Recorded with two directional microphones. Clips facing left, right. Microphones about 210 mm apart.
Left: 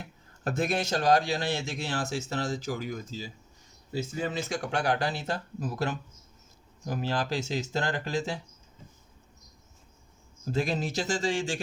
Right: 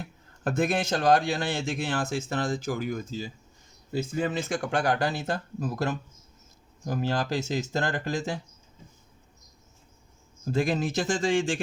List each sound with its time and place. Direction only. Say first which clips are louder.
0.5 s speech: right 2 dB; 50° right (ahead or behind)
10.5 s speech: right 3 dB; 50° right (ahead or behind)